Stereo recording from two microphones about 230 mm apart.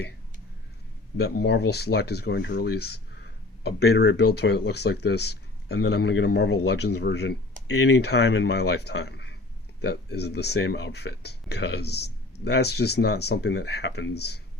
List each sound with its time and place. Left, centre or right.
1.1 s speech: left